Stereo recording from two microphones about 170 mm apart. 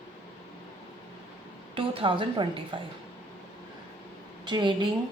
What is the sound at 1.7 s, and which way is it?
Speech, 30° right (ahead or behind).